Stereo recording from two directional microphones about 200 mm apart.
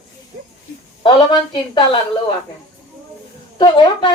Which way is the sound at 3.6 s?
20° left (ahead or behind).